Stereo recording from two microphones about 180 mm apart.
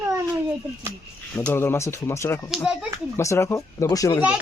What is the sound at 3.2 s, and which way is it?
Speech, 15° left (ahead or behind).